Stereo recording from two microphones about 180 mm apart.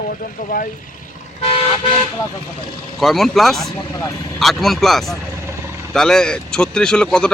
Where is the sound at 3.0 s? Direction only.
Centre (ahead or behind).